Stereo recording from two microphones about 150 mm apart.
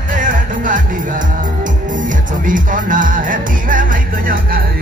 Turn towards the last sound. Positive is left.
turn(degrees=-75)  # may be behind; listen again after turning